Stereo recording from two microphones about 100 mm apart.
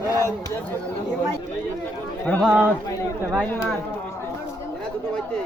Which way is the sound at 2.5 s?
10° right (ahead or behind).